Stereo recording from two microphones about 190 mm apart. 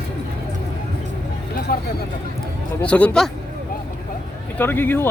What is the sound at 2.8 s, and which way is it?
Speech, 5° left (ahead or behind).